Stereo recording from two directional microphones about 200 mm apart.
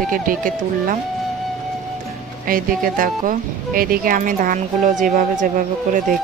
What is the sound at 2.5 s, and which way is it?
Speech, 45° right (ahead or behind).